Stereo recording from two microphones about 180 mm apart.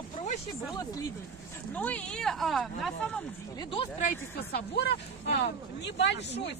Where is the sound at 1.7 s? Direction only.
10° left (ahead or behind).